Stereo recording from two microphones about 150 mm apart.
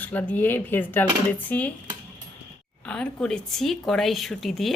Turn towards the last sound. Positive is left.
turn(degrees=0)  # may be behind; listen again after turning